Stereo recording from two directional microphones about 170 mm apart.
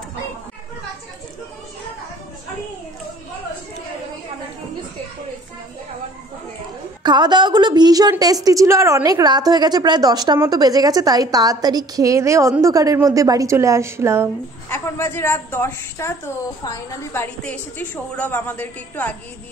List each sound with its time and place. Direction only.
7.0 s a woman's voice: 25° right (ahead or behind)
14.7 s a woman's voice: 15° left (ahead or behind)